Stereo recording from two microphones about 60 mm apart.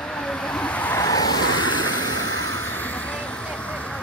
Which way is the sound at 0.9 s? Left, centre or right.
Left.